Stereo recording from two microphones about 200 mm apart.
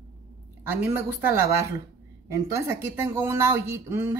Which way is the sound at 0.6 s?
10° right (ahead or behind).